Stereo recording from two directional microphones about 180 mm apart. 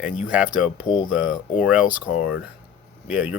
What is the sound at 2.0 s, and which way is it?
Speech, 35° left (ahead or behind).